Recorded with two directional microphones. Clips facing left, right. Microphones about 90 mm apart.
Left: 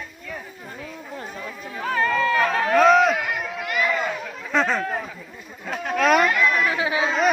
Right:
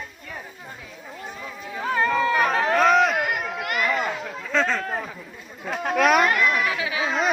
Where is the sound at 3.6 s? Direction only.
45° right (ahead or behind).